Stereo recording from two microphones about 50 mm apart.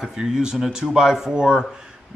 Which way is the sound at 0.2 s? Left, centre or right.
Centre.